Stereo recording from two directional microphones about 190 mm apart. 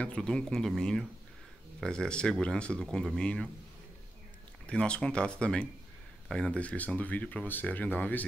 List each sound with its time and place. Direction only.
0.0 s speech: 5° left (ahead or behind)
4.6 s speech: 5° left (ahead or behind)